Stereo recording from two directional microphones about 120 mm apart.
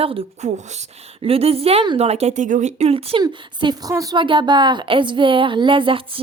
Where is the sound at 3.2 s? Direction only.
35° right (ahead or behind).